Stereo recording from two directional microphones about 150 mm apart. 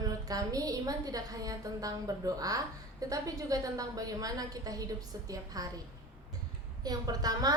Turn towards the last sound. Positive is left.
turn(degrees=-25)  # may be behind; listen again after turning